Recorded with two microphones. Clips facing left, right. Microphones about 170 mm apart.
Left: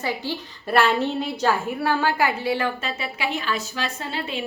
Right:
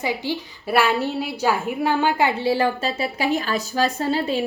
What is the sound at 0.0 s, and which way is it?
A woman's voice, 15° right (ahead or behind).